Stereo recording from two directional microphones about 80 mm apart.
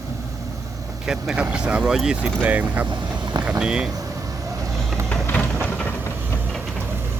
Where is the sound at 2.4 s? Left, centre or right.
Centre.